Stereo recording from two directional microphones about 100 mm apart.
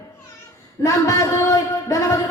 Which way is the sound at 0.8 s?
30° left (ahead or behind).